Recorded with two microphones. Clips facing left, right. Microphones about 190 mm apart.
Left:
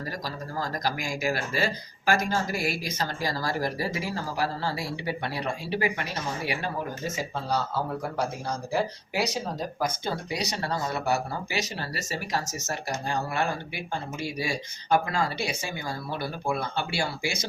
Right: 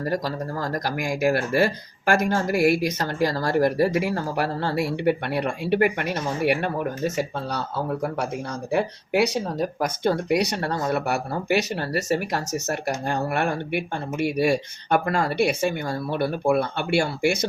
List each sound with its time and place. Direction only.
0.6 s speech: 60° right (ahead or behind)
8.7 s speech: 65° right (ahead or behind)